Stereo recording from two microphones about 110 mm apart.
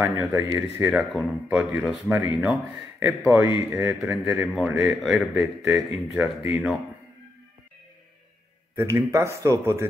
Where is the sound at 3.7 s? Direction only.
15° right (ahead or behind).